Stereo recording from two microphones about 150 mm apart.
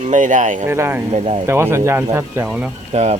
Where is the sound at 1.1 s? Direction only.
45° right (ahead or behind).